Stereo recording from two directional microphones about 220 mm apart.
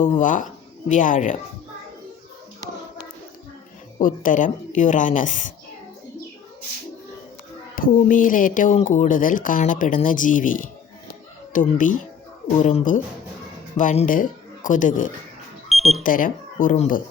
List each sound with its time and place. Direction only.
0.2 s speech: 35° left (ahead or behind)
3.9 s speech: 35° left (ahead or behind)
7.8 s speech: 40° left (ahead or behind)
11.8 s speech: 35° left (ahead or behind)
15.7 s alarm: centre (ahead or behind)
16.0 s speech: 40° left (ahead or behind)